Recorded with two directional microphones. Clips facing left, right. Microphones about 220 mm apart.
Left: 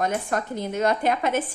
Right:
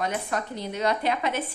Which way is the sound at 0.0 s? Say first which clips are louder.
Left 3 dB; 50° left (ahead or behind).